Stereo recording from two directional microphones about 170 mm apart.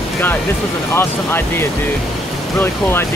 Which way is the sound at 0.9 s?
15° left (ahead or behind).